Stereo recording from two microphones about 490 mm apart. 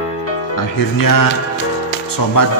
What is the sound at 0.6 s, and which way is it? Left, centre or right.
Speech, left.